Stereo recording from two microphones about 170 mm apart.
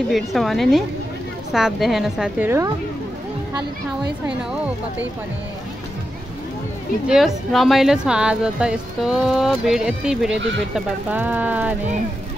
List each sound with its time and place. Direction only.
0.1 s speech: centre (ahead or behind)
7.1 s speech: centre (ahead or behind)
10.3 s speech: 90° right
10.7 s speech: 10° right (ahead or behind)